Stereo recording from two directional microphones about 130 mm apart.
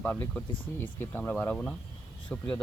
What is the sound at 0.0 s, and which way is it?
Speech, 10° left (ahead or behind).